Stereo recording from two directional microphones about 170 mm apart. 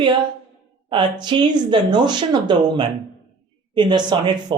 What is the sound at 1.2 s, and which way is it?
Speech, 25° right (ahead or behind).